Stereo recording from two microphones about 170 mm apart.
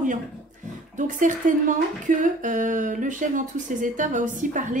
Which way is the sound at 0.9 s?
50° right (ahead or behind).